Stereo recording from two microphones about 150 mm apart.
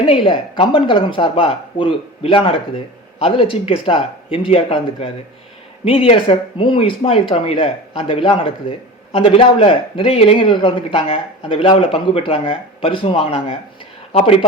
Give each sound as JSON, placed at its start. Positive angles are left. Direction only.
{"t": 0.3, "sound": "a man's voice", "side_deg": 35}